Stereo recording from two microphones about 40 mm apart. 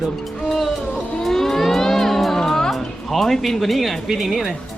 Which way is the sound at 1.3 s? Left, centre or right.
Centre.